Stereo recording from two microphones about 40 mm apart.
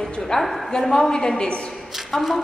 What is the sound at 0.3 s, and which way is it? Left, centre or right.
A woman's voice, centre.